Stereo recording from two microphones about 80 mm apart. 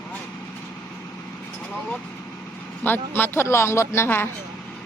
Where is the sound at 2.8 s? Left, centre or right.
Left.